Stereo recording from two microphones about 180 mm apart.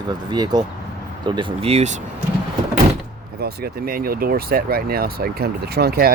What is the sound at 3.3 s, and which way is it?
Speech, 60° right (ahead or behind).